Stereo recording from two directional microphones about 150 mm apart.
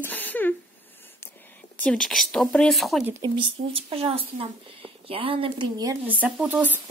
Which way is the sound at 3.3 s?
40° right (ahead or behind).